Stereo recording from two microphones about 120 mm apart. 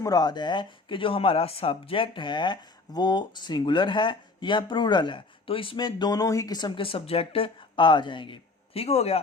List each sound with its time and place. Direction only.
0.0 s speech: 30° left (ahead or behind)
8.7 s speech: 60° left (ahead or behind)